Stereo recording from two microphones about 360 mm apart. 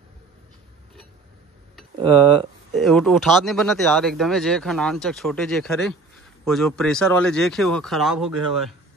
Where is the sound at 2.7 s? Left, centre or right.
Centre.